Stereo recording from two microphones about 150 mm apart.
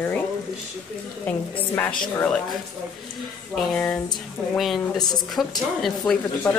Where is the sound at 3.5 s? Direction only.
5° left (ahead or behind).